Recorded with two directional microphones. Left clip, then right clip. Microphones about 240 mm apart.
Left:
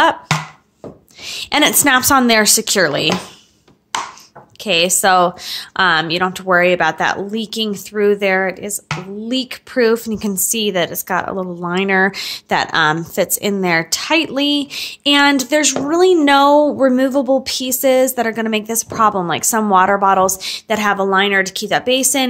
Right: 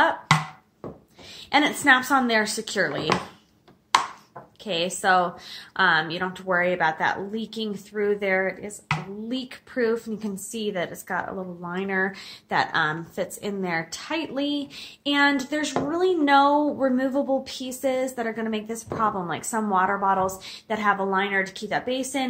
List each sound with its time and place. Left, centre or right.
1.2 s a woman's voice: left
4.6 s a woman's voice: left